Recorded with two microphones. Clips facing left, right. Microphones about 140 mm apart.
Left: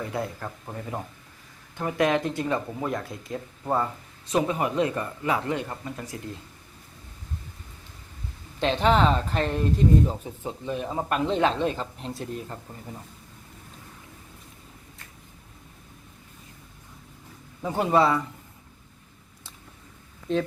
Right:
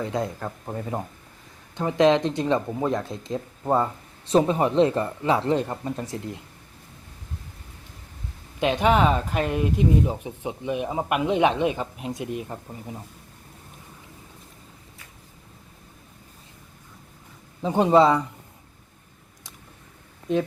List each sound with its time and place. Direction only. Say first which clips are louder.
0.0 s speech: right 3 dB; 20° right (ahead or behind)
8.5 s speech: right 1 dB; 10° right (ahead or behind)
17.6 s speech: right 4 dB; 20° right (ahead or behind)